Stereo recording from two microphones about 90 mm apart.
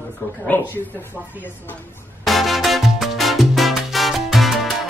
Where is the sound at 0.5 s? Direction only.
20° left (ahead or behind).